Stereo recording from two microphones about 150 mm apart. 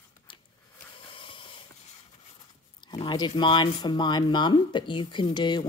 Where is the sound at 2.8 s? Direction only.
30° left (ahead or behind).